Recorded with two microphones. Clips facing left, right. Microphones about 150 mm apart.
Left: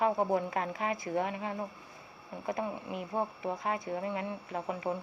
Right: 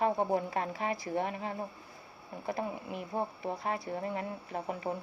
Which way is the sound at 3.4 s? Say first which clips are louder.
Left 1 dB; 35° right (ahead or behind).